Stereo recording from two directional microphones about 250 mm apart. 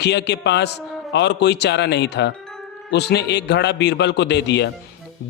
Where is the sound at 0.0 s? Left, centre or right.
Left.